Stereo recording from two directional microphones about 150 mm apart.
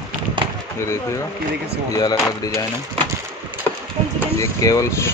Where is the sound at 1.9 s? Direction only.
25° left (ahead or behind).